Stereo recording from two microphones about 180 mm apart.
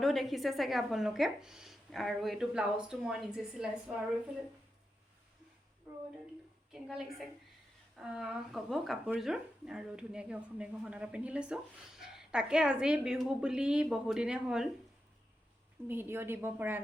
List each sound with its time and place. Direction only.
0.0 s speech: centre (ahead or behind)
6.7 s speech: centre (ahead or behind)
15.9 s a woman's voice: 10° right (ahead or behind)